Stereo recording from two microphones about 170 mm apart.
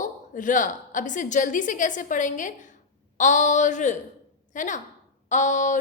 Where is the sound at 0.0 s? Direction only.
50° left (ahead or behind).